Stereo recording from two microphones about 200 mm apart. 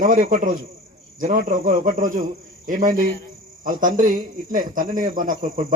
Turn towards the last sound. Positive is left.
turn(degrees=-40)  # may be behind; listen again after turning